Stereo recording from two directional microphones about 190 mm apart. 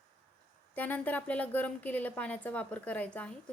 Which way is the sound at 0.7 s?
10° left (ahead or behind).